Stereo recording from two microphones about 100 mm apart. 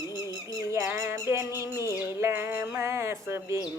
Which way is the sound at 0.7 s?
30° right (ahead or behind).